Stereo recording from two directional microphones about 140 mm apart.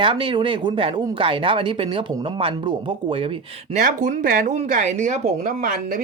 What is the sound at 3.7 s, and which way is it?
Speech, 70° right (ahead or behind).